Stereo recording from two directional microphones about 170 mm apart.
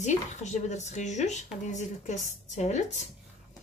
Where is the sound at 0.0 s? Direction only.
45° left (ahead or behind).